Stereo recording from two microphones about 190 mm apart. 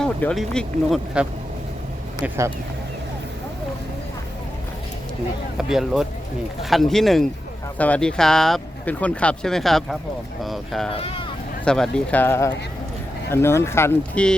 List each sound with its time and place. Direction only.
0.0 s speech: 5° left (ahead or behind); by 2.5 s 10° right (ahead or behind)
5.5 s speech: 5° right (ahead or behind)
10.9 s speech: 30° left (ahead or behind)
11.6 s speech: 5° left (ahead or behind)